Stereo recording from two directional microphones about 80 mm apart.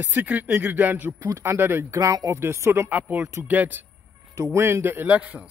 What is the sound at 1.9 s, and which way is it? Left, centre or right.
Speech, right.